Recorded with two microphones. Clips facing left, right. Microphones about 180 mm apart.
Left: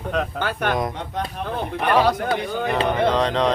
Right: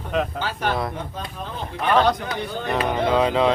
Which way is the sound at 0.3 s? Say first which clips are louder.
Left 2 dB; 55° left (ahead or behind).